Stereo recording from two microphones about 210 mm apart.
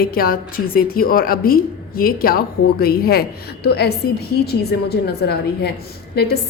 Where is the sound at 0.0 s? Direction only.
45° left (ahead or behind).